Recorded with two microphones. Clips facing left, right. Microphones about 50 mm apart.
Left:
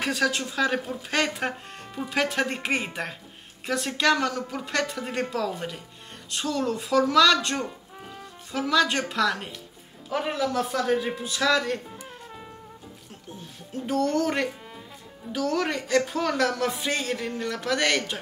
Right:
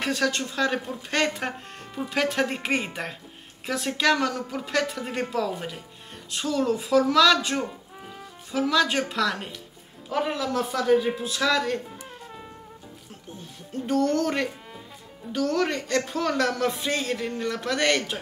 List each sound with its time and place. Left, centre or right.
0.0 s a man's voice: centre